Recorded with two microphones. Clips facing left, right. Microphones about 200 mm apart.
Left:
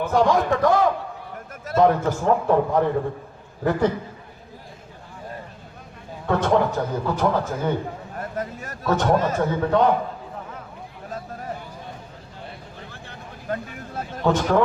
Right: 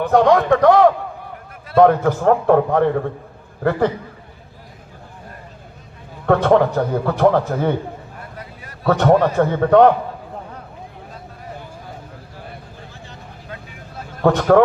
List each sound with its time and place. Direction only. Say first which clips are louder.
0.0 s a man's voice: right 5 dB; 60° right (ahead or behind)
6.2 s a man's voice: right 6 dB; 60° right (ahead or behind)
8.4 s speech: left 6 dB; 45° left (ahead or behind)
8.9 s a man's voice: right 6 dB; 60° right (ahead or behind)
12.9 s vehicle: right 1 dB; 55° left (ahead or behind)
14.3 s a man's voice: right 6 dB; 60° right (ahead or behind)